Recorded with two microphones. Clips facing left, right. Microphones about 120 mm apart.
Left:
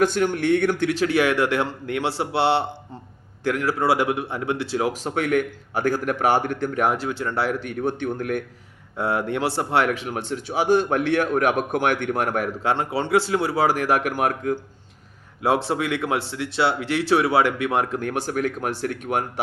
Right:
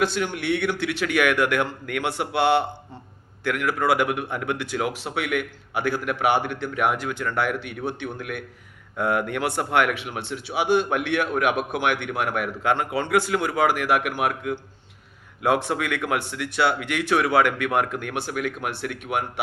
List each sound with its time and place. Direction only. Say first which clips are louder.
0.0 s speech: left 4 dB; 45° left (ahead or behind)
4.9 s speech: left 4 dB; 40° left (ahead or behind)
9.0 s speech: even; 30° left (ahead or behind)
15.4 s speech: left 1 dB; 30° left (ahead or behind)